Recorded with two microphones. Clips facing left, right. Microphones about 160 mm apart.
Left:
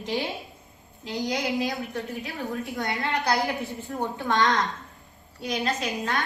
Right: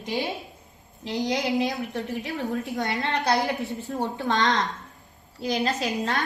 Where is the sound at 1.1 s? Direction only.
20° right (ahead or behind).